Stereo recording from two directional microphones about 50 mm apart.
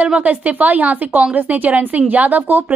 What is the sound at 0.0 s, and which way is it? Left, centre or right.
A woman's voice, right.